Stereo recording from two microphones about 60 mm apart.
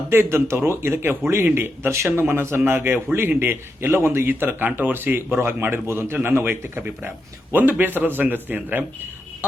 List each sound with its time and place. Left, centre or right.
0.1 s a man's voice: right